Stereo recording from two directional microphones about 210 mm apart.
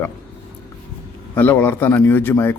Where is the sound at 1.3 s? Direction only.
10° left (ahead or behind).